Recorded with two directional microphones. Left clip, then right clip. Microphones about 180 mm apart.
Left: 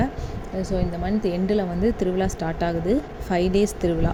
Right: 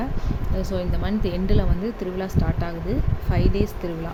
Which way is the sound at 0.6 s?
Centre (ahead or behind).